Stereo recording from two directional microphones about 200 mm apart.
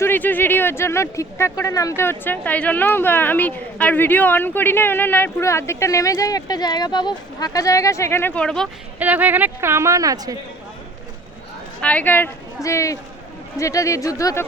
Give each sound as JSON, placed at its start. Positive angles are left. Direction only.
{"t": 0.0, "sound": "a woman's voice", "side_deg": 10}
{"t": 9.0, "sound": "speech", "side_deg": -10}
{"t": 11.8, "sound": "a woman's voice", "side_deg": 5}